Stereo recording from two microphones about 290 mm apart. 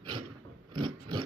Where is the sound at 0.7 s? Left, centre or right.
Centre.